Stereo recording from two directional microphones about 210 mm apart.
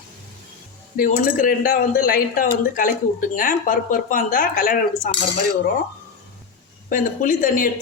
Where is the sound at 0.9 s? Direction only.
40° left (ahead or behind).